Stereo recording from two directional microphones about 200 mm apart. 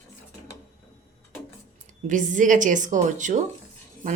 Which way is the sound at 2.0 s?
40° right (ahead or behind).